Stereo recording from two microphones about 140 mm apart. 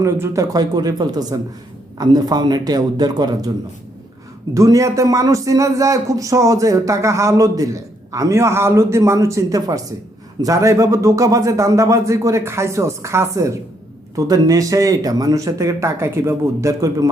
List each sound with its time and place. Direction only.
0.0 s a man's voice: 25° right (ahead or behind)
4.5 s a man's voice: 20° right (ahead or behind)